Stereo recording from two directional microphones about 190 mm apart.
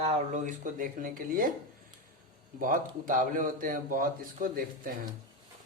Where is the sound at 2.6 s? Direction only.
45° right (ahead or behind).